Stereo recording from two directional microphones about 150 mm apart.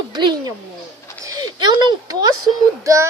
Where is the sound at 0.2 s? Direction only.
30° right (ahead or behind).